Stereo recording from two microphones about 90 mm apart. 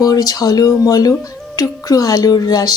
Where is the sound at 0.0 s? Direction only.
40° left (ahead or behind).